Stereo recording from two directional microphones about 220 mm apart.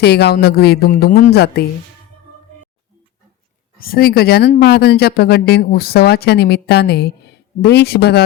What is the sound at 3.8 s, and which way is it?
Speech, 45° left (ahead or behind).